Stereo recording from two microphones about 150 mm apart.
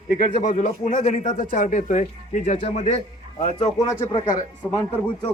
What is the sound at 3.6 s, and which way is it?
Speech, 20° left (ahead or behind).